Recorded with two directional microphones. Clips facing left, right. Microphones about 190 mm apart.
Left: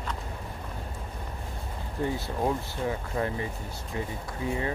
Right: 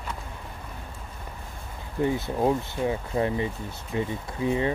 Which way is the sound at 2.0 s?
20° right (ahead or behind).